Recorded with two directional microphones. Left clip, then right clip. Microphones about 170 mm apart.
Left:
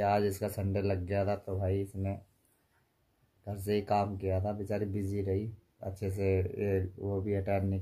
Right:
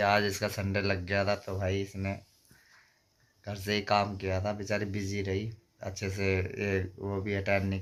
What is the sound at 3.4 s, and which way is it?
Speech, 10° left (ahead or behind).